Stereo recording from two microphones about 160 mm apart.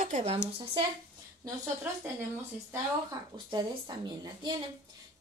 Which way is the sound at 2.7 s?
25° right (ahead or behind).